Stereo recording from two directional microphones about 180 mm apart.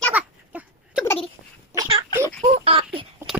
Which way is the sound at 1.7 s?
20° right (ahead or behind).